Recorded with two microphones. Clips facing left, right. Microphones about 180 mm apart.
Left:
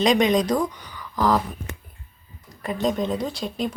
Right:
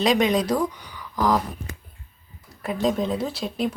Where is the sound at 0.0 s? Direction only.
5° right (ahead or behind).